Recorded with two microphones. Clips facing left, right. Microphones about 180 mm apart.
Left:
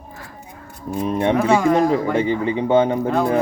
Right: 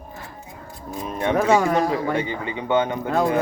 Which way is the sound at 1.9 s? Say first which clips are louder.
Left 5 dB; 30° left (ahead or behind).